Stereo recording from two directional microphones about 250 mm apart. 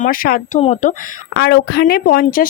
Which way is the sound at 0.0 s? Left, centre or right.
Left.